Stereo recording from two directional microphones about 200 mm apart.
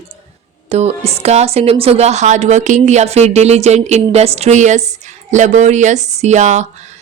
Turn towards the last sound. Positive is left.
turn(degrees=-35)  # may be behind; listen again after turning